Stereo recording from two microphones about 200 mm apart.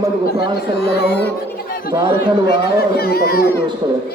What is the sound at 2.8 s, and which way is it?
Speech, 50° left (ahead or behind).